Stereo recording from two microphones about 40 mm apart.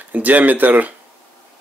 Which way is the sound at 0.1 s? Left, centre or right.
Right.